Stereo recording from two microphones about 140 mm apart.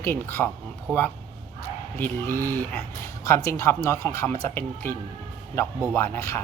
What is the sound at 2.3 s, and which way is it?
Speech, 25° right (ahead or behind).